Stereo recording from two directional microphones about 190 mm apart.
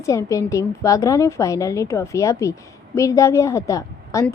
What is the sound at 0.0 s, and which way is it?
A woman's voice, 15° left (ahead or behind).